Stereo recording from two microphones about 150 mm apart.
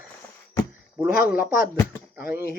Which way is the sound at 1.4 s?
70° left (ahead or behind).